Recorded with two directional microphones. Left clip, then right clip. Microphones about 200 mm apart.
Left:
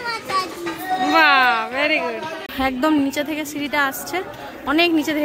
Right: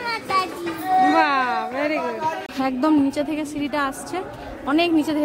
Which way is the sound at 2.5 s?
Centre (ahead or behind).